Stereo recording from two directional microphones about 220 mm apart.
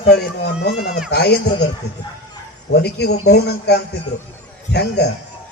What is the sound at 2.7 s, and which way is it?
Speech, 50° left (ahead or behind).